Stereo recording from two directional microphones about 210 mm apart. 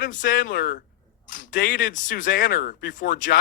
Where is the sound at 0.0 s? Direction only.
40° left (ahead or behind).